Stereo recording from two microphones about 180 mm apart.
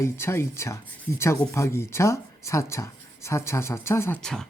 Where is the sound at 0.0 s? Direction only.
15° left (ahead or behind).